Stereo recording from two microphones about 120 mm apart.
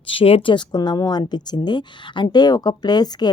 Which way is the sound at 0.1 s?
50° left (ahead or behind).